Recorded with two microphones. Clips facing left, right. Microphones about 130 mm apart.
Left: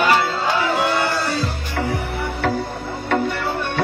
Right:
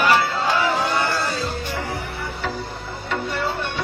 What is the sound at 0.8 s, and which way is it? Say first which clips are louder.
Music: left 2 dB; 70° left (ahead or behind).